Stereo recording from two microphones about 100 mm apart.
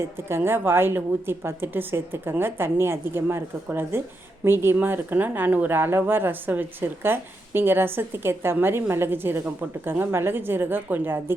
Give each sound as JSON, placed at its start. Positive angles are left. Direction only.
{"t": 0.3, "sound": "speech", "side_deg": -25}